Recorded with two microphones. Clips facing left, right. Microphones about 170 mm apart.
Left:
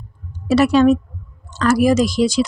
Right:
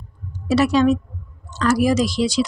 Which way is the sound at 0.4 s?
55° left (ahead or behind).